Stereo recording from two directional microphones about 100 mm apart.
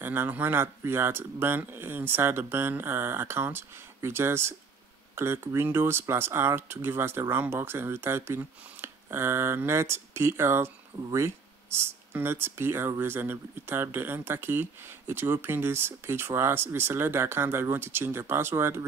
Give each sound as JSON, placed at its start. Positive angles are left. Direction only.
{"t": 0.0, "sound": "speech", "side_deg": -20}